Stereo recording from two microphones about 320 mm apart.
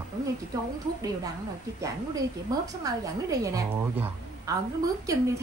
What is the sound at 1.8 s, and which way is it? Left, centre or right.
A man's voice, centre.